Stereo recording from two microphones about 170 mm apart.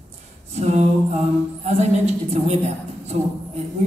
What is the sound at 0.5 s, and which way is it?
A man's voice, 40° right (ahead or behind).